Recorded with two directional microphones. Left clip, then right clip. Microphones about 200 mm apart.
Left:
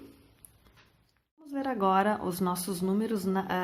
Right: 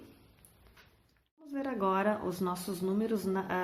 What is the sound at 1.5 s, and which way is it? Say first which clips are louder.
Speech: left 5 dB; 25° left (ahead or behind).